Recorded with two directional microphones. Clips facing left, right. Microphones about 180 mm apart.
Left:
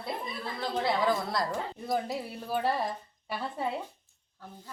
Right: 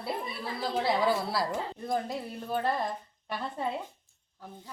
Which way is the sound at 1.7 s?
5° left (ahead or behind).